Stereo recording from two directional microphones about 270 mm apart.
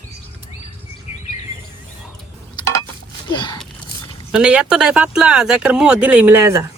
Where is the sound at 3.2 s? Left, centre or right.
Centre.